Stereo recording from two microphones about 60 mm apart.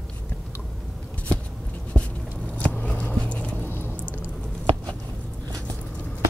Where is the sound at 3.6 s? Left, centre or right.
Left.